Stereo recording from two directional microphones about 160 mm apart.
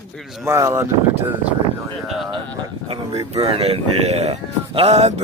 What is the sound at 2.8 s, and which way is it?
Speech, 40° right (ahead or behind).